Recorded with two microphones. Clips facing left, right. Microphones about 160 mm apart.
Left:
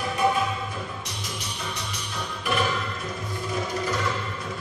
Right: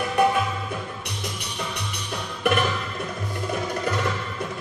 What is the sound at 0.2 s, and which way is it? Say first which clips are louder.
Music: right 3 dB; 65° right (ahead or behind).